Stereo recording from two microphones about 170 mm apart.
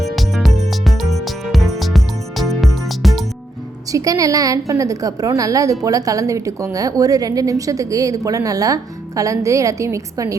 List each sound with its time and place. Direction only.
0.2 s music: centre (ahead or behind)
3.9 s a woman's voice: 20° right (ahead or behind)